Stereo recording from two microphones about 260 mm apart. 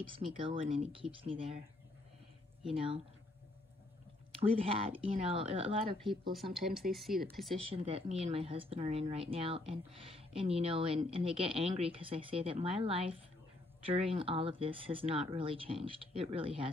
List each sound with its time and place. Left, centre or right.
0.1 s a woman's voice: centre
2.7 s a woman's voice: right
4.4 s a woman's voice: right
6.5 s speech: centre
7.5 s a woman's voice: right